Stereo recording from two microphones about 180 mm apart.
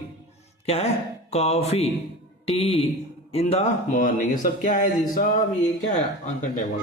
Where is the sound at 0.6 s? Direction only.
35° left (ahead or behind); by 5.3 s 50° left (ahead or behind).